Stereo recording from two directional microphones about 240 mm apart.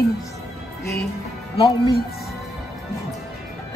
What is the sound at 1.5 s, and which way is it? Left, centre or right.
Speech, centre.